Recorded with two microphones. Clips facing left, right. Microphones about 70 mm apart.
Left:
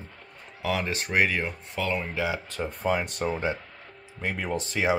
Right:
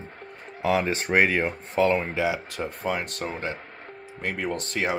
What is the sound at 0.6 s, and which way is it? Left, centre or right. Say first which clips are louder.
Speech: right 5 dB; right.